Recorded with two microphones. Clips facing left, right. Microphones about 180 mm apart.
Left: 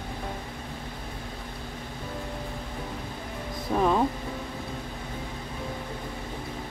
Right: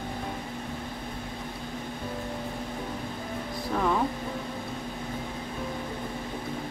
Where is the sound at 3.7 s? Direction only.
20° left (ahead or behind).